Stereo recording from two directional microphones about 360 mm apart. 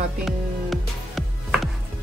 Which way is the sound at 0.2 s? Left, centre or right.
Centre.